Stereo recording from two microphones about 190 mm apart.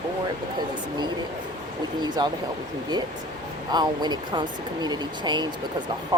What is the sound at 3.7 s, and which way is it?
Speech, 20° right (ahead or behind).